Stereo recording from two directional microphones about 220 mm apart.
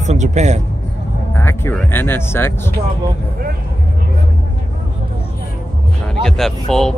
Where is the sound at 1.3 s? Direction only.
10° left (ahead or behind).